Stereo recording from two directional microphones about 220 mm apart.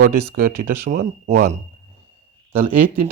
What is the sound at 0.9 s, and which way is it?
Speech, 35° right (ahead or behind).